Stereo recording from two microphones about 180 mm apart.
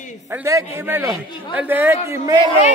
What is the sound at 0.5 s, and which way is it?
A man's voice, 15° right (ahead or behind).